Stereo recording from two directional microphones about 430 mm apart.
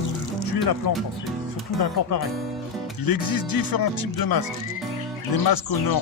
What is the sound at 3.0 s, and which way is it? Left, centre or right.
Speech, left.